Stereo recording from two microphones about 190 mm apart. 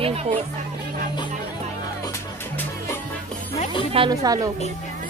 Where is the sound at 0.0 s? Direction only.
30° right (ahead or behind).